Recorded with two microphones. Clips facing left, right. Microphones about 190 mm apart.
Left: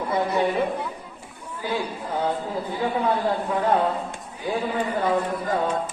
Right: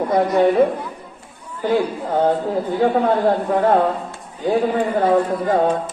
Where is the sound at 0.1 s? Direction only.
60° right (ahead or behind).